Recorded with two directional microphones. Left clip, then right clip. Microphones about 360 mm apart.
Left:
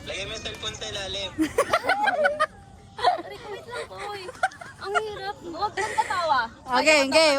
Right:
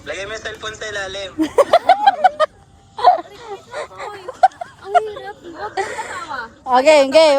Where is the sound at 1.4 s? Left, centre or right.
Centre.